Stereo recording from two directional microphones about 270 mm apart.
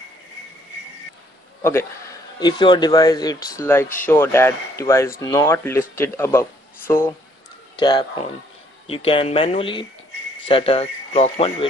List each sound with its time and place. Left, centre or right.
1.6 s a man's voice: centre
7.7 s a sound: centre
8.8 s speech: left